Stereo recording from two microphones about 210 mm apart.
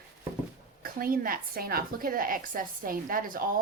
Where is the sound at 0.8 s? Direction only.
45° right (ahead or behind).